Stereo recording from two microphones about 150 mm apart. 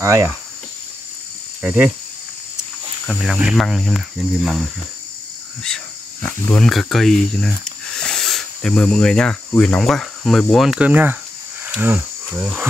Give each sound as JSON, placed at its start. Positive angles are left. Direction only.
{"t": 0.0, "sound": "cricket", "side_deg": -20}
{"t": 1.6, "sound": "cricket", "side_deg": -10}
{"t": 3.1, "sound": "cricket", "side_deg": -5}
{"t": 6.2, "sound": "speech", "side_deg": 5}
{"t": 11.6, "sound": "cricket", "side_deg": -15}